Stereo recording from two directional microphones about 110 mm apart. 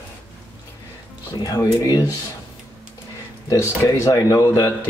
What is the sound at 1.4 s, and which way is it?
Speech, 35° left (ahead or behind).